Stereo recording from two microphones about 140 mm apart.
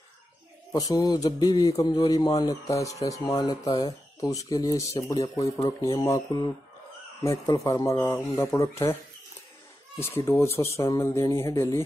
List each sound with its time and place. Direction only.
0.7 s speech: 25° left (ahead or behind)
9.9 s speech: 20° left (ahead or behind)